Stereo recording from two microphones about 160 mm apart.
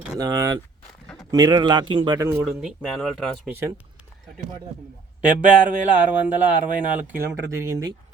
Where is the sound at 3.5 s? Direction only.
15° right (ahead or behind).